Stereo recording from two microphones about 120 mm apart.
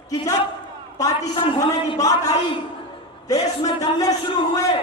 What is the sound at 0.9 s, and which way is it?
A man's voice, 30° left (ahead or behind).